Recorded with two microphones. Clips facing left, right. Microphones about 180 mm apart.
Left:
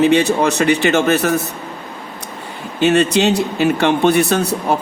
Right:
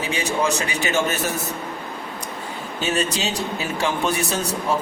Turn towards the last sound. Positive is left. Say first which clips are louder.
# left 7 dB
turn(degrees=65)  # may be behind; listen again after turning